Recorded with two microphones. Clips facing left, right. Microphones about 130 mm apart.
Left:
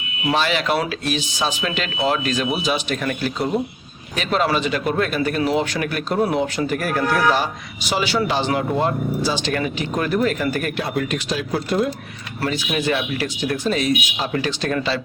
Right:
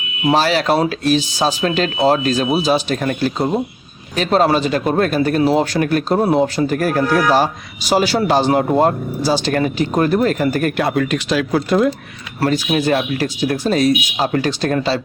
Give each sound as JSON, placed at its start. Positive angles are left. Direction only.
{"t": 0.3, "sound": "speech", "side_deg": -35}
{"t": 10.8, "sound": "speech", "side_deg": -80}
{"t": 12.4, "sound": "speech", "side_deg": -40}